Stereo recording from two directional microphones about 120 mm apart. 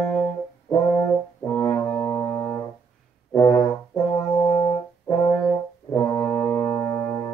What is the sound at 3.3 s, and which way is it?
Brass instrument, 30° left (ahead or behind).